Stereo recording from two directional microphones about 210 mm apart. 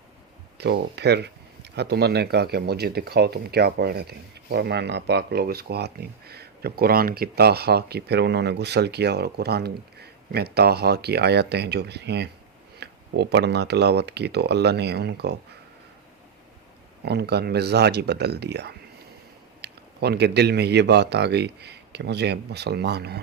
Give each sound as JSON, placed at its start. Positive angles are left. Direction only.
{"t": 0.6, "sound": "speech", "side_deg": -50}
{"t": 17.1, "sound": "speech", "side_deg": -50}